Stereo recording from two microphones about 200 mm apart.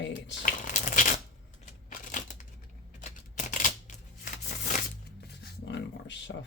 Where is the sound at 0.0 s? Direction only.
65° left (ahead or behind).